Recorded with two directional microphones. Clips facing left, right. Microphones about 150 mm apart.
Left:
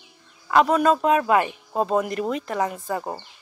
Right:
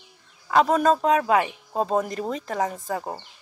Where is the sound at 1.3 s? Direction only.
50° left (ahead or behind).